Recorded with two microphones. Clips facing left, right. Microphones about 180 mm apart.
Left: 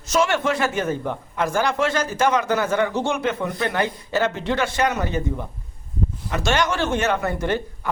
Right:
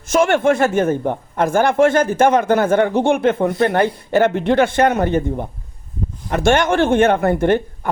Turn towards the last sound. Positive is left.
turn(degrees=-55)  # may be behind; listen again after turning